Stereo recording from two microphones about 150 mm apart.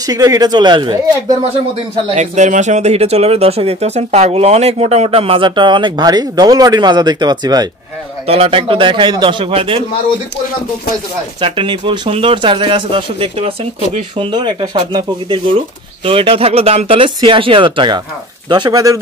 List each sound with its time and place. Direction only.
0.0 s speech: 25° right (ahead or behind)
2.1 s speech: 50° right (ahead or behind); by 7.6 s 25° right (ahead or behind)
8.3 s speech: 40° right (ahead or behind)
11.4 s speech: 35° right (ahead or behind)